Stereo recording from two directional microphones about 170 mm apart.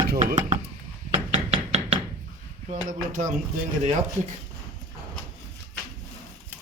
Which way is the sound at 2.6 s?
45° right (ahead or behind).